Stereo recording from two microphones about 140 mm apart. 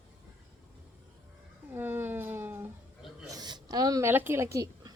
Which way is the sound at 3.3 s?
30° right (ahead or behind).